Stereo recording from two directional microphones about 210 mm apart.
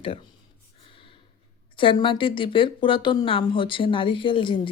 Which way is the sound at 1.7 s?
25° left (ahead or behind).